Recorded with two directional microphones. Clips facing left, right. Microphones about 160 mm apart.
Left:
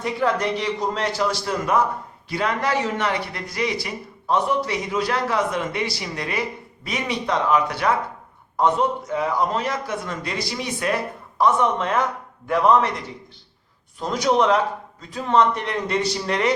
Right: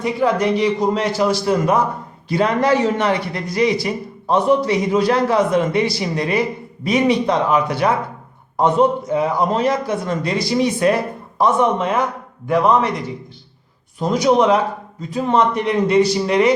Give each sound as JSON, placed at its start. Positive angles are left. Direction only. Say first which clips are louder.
{"t": 0.0, "sound": "a man's voice", "louder": "right 5 dB", "side_deg": -5}
{"t": 2.3, "sound": "a man's voice", "louder": "right 7 dB", "side_deg": -25}
{"t": 12.5, "sound": "a man's voice", "louder": "right 2 dB", "side_deg": 0}